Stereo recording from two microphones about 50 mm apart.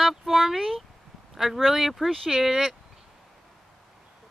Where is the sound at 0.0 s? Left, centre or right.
Centre.